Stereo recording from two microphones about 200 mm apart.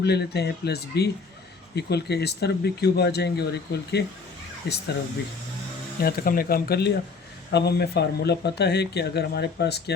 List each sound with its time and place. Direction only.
0.0 s speech: 55° left (ahead or behind)
6.0 s speech: 50° left (ahead or behind)